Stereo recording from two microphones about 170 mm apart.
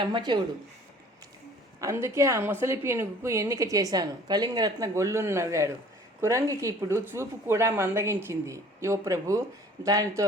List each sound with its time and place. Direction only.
0.0 s a man's voice: 25° right (ahead or behind)
1.8 s a woman's voice: 15° right (ahead or behind)